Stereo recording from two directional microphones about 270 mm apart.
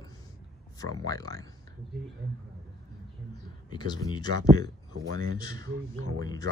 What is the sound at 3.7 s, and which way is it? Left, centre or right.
Speech, centre.